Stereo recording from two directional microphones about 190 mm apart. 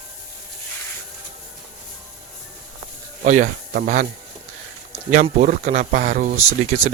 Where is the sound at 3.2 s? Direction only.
45° right (ahead or behind).